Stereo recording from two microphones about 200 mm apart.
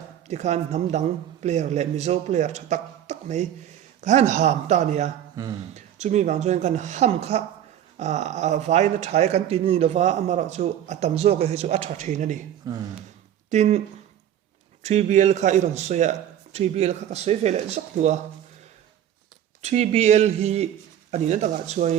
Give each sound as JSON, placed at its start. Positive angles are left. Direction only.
{"t": 0.3, "sound": "a man's voice", "side_deg": -35}
{"t": 12.7, "sound": "speech", "side_deg": -20}
{"t": 13.5, "sound": "a man's voice", "side_deg": -35}
{"t": 14.8, "sound": "a man's voice", "side_deg": -35}
{"t": 19.6, "sound": "a man's voice", "side_deg": -35}